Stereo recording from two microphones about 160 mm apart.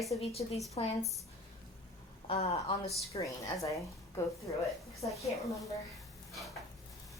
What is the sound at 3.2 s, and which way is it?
Speech, 20° left (ahead or behind).